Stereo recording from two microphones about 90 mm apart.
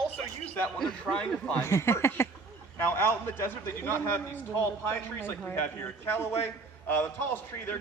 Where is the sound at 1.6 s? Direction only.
30° left (ahead or behind).